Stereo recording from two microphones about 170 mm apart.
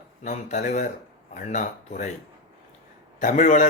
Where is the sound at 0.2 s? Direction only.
45° left (ahead or behind).